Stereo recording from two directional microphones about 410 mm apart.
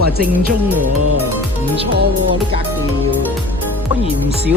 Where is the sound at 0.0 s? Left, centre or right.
Right.